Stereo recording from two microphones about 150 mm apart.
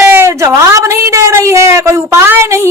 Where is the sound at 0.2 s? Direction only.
20° right (ahead or behind).